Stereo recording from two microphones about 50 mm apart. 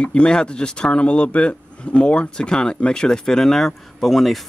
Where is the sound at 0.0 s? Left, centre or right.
Left.